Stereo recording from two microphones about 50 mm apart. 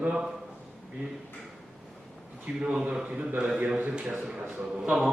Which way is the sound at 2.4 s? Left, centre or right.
Centre.